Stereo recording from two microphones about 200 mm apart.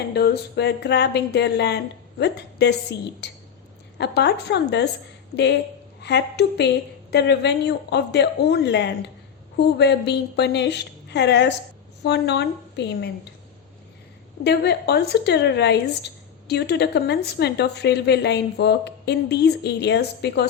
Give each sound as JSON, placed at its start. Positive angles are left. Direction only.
{"t": 0.1, "sound": "speech", "side_deg": 55}
{"t": 6.0, "sound": "speech", "side_deg": 55}
{"t": 14.4, "sound": "speech", "side_deg": 55}